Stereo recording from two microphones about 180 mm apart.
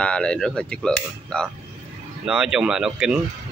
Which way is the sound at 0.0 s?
5° left (ahead or behind).